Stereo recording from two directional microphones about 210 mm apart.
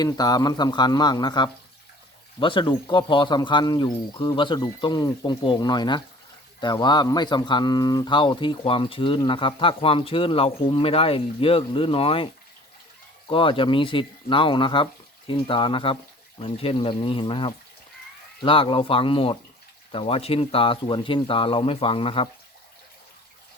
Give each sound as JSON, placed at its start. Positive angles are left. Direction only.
{"t": 0.0, "sound": "speech", "side_deg": 20}